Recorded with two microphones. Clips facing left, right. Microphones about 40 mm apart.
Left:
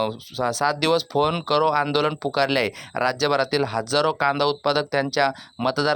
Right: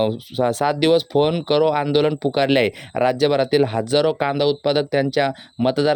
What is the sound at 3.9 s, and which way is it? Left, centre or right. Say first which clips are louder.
Speech: right 2 dB; centre.